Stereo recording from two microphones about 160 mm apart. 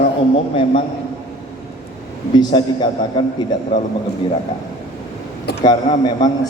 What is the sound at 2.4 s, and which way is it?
Speech, 30° left (ahead or behind).